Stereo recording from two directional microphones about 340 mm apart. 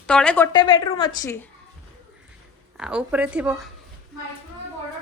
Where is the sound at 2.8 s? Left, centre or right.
Centre.